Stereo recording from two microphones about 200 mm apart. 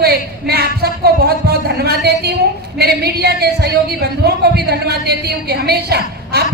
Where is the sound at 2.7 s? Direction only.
55° right (ahead or behind).